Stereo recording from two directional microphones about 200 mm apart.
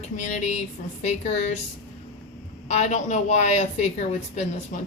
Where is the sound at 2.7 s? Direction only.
35° left (ahead or behind).